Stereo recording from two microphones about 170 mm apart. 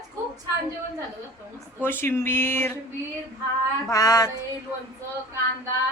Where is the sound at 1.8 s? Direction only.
15° left (ahead or behind).